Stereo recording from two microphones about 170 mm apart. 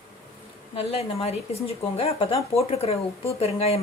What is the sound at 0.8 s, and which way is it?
A woman's voice, 35° left (ahead or behind).